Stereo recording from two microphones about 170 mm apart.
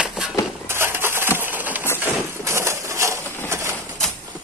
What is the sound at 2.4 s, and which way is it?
Crushing, 15° right (ahead or behind).